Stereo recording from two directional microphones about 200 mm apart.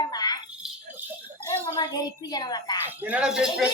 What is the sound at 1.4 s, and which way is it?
Speech, 15° left (ahead or behind).